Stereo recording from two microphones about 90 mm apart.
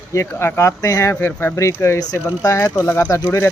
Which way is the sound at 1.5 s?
30° left (ahead or behind).